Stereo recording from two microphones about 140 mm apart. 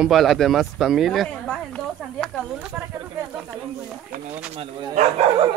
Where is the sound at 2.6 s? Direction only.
10° right (ahead or behind).